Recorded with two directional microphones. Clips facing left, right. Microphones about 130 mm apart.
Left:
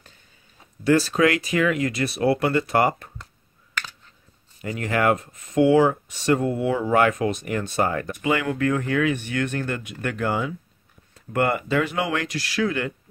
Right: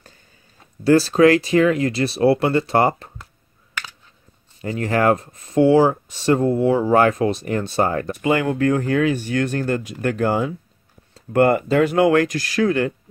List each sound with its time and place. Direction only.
0.8 s speech: 35° right (ahead or behind)
4.6 s speech: 30° right (ahead or behind)